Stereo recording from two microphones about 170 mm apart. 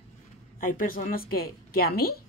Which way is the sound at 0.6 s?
55° left (ahead or behind).